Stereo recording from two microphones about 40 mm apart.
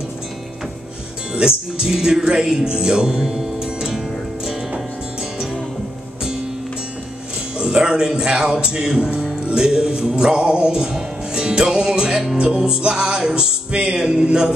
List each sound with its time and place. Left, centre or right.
1.3 s speech: right
7.5 s music: right